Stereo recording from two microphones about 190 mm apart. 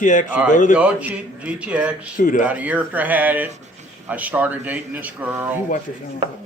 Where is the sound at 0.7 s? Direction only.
5° right (ahead or behind).